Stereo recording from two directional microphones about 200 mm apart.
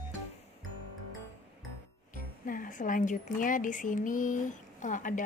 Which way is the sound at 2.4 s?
45° left (ahead or behind).